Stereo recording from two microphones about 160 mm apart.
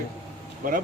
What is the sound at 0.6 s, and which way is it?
Speech, 60° right (ahead or behind).